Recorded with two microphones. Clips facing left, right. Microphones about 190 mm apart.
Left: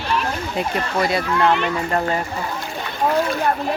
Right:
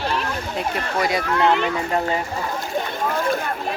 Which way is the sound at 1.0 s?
15° right (ahead or behind).